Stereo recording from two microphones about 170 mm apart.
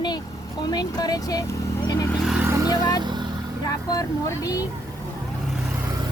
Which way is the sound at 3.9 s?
20° left (ahead or behind).